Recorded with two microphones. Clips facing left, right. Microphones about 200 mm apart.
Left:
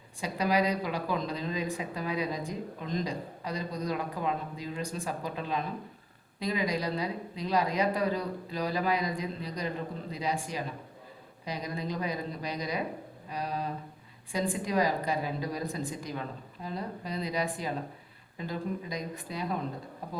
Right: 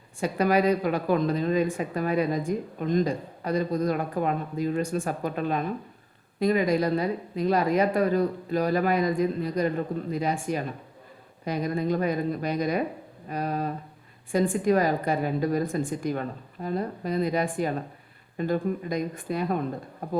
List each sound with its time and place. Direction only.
0.2 s a woman's voice: 55° right (ahead or behind)